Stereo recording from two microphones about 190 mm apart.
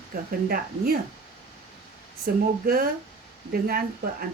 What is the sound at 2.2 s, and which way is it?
Speech, 50° right (ahead or behind).